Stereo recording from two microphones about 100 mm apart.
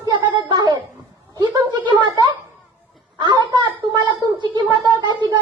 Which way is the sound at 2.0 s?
45° right (ahead or behind).